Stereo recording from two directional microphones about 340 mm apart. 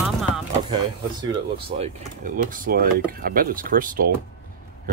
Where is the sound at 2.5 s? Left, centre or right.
Right.